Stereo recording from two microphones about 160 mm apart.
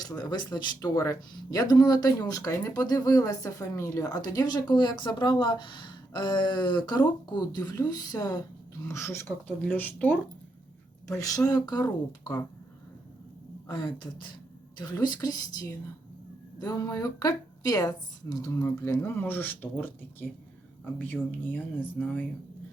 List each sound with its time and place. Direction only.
0.0 s speech: 25° left (ahead or behind)
13.7 s speech: 30° left (ahead or behind); by 22.2 s 10° left (ahead or behind)